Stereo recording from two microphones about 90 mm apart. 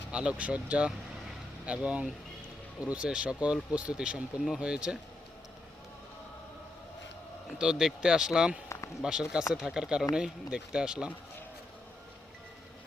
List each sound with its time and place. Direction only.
0.1 s speech: 10° right (ahead or behind)
7.6 s speech: 5° right (ahead or behind)